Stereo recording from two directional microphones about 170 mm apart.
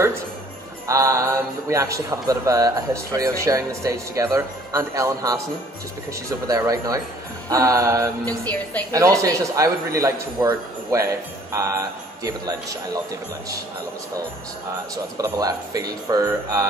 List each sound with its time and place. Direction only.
0.8 s speech: 20° right (ahead or behind)
12.2 s speech: 20° right (ahead or behind)
15.1 s speech: 20° right (ahead or behind)